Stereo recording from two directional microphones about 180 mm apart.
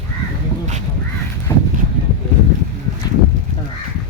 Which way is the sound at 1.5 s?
20° left (ahead or behind).